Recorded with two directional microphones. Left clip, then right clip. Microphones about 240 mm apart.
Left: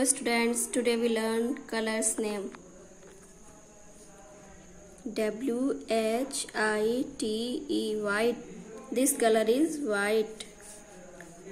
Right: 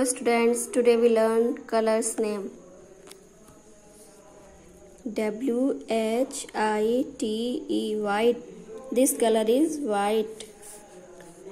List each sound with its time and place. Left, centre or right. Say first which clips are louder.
0.0 s a woman's voice: right 5 dB; centre
5.1 s speech: right 3 dB; centre
7.3 s a sound: right 4 dB; left
7.8 s speech: right 5 dB; centre